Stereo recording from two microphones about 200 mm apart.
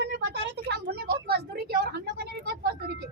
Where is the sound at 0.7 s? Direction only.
55° right (ahead or behind).